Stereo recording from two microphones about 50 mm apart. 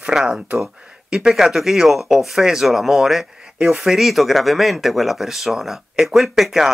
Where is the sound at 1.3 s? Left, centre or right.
Centre.